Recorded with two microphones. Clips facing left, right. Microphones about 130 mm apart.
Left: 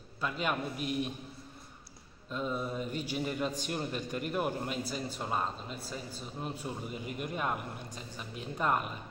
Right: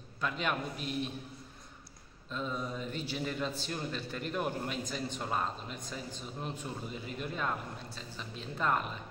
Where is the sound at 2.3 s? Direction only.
5° left (ahead or behind).